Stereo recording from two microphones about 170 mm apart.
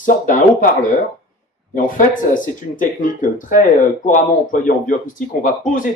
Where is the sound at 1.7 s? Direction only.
50° left (ahead or behind).